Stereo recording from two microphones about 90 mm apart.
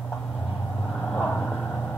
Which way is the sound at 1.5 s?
15° left (ahead or behind).